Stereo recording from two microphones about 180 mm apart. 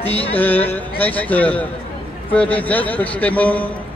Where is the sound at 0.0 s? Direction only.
30° left (ahead or behind).